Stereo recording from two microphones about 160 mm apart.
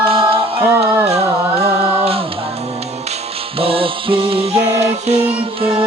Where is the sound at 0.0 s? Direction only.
35° right (ahead or behind).